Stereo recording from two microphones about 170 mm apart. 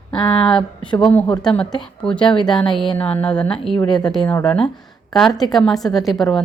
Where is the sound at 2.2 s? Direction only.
30° left (ahead or behind).